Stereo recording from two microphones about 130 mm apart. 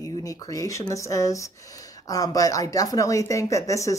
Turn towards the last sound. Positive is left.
turn(degrees=25)  # may be behind; listen again after turning